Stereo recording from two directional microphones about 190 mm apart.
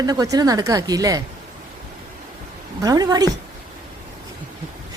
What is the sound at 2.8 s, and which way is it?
Speech, 20° right (ahead or behind).